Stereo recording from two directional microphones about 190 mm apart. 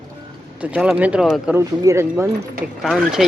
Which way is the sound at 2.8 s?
Centre (ahead or behind).